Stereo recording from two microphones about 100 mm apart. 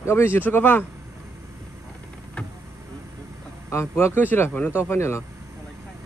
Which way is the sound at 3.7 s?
30° left (ahead or behind).